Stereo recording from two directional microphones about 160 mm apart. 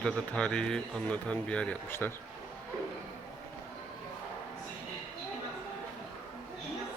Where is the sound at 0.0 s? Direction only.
5° left (ahead or behind).